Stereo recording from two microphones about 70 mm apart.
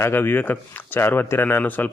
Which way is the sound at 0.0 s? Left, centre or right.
Left.